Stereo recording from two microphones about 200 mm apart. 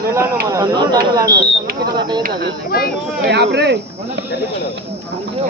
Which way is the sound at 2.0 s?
20° right (ahead or behind).